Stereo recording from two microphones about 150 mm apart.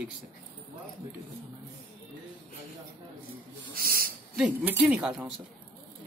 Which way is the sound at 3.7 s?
80° right.